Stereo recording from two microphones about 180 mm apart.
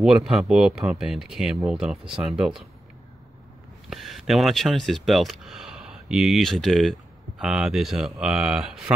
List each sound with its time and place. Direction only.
0.0 s speech: centre (ahead or behind)
3.9 s speech: centre (ahead or behind)